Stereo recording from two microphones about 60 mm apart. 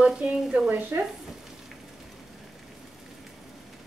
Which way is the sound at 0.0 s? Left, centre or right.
Centre.